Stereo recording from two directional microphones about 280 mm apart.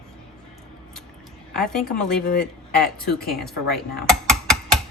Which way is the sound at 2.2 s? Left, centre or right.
Left.